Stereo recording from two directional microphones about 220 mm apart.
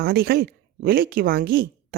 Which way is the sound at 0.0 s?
45° right (ahead or behind).